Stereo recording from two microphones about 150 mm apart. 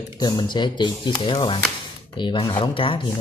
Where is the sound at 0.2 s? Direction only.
25° left (ahead or behind).